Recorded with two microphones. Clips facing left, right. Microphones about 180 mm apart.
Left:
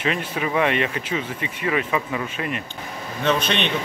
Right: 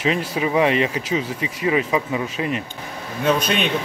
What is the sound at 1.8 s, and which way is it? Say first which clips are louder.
Speech: right 3 dB; 15° right (ahead or behind).